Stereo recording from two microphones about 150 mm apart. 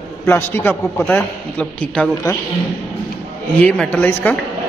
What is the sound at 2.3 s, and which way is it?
Speech, 20° left (ahead or behind).